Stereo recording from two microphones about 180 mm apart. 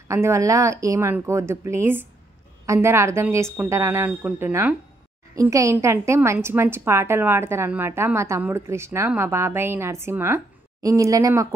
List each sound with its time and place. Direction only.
0.1 s a woman's voice: 15° right (ahead or behind)